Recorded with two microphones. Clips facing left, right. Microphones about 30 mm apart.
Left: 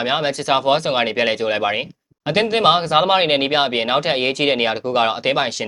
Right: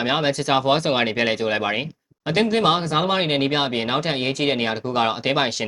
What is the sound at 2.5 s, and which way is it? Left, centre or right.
Speech, left.